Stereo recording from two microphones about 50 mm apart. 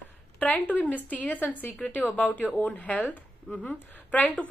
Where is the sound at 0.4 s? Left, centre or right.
Left.